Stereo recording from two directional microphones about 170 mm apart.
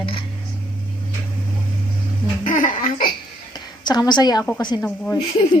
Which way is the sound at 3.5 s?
25° left (ahead or behind).